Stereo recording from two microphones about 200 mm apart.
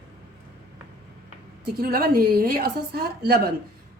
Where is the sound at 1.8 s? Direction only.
50° right (ahead or behind).